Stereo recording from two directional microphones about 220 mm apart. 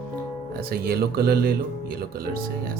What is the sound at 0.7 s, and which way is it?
Speech, 45° right (ahead or behind).